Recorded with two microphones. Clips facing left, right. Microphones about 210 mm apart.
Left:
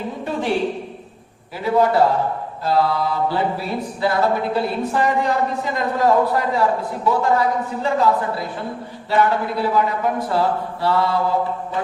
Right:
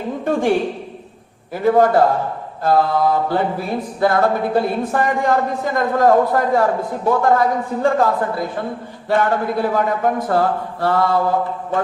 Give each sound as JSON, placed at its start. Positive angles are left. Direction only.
{"t": 0.3, "sound": "mantra", "side_deg": -50}
{"t": 1.5, "sound": "mantra", "side_deg": -50}